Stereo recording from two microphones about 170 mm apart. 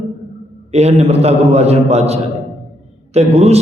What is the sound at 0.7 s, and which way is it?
A man's voice, 40° right (ahead or behind).